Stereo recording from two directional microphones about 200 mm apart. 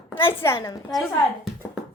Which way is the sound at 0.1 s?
10° left (ahead or behind).